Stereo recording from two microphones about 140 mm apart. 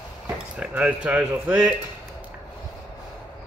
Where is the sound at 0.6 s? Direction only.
10° right (ahead or behind).